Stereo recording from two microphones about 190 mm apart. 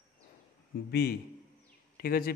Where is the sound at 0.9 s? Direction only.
55° left (ahead or behind).